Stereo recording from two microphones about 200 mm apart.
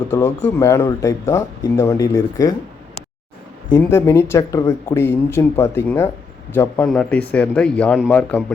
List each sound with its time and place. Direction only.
0.1 s speech: 10° left (ahead or behind)
3.7 s speech: 15° left (ahead or behind)